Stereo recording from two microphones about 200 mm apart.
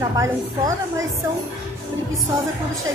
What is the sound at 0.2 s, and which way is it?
Speech, 15° right (ahead or behind).